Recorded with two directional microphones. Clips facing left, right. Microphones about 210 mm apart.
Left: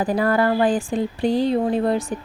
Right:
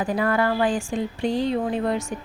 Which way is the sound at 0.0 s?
35° left (ahead or behind).